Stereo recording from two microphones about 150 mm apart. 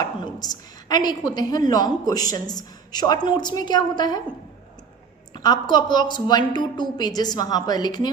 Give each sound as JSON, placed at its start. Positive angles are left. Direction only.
{"t": 0.0, "sound": "a woman's voice", "side_deg": 25}
{"t": 5.3, "sound": "a woman's voice", "side_deg": 30}